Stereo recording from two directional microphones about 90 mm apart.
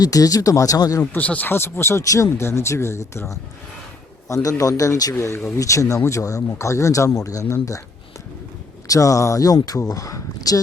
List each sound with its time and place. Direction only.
0.0 s speech: 40° left (ahead or behind)
1.1 s speech: 15° left (ahead or behind)
4.3 s speech: 35° left (ahead or behind)
8.9 s speech: 40° left (ahead or behind)